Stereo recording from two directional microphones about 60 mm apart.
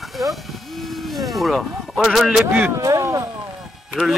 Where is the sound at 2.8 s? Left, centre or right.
Right.